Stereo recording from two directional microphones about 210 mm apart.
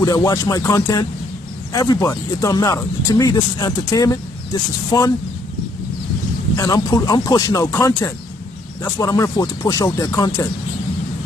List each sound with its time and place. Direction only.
0.0 s speech: 15° left (ahead or behind)
6.5 s speech: 15° left (ahead or behind)